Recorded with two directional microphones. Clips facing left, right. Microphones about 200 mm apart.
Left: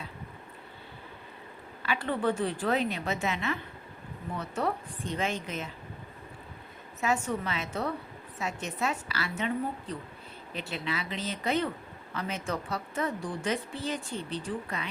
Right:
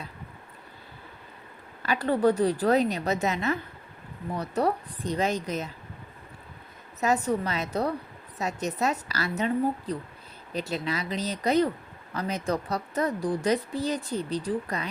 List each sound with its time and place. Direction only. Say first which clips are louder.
1.8 s a woman's voice: right 6 dB; 40° right (ahead or behind)
7.0 s a woman's voice: right 4 dB; 35° right (ahead or behind)